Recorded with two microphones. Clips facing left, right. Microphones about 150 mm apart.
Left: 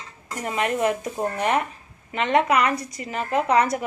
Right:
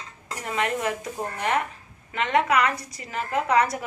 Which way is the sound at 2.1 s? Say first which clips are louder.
Left 2 dB; 20° left (ahead or behind).